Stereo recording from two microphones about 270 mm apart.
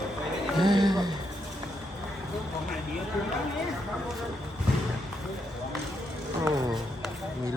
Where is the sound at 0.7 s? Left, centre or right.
Centre.